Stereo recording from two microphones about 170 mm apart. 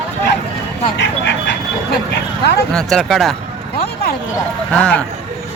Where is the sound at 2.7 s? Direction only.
Centre (ahead or behind).